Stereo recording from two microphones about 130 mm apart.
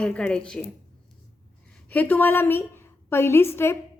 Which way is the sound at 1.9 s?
15° left (ahead or behind).